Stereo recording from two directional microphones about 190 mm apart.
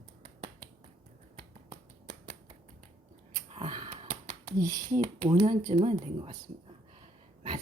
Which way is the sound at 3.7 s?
25° right (ahead or behind).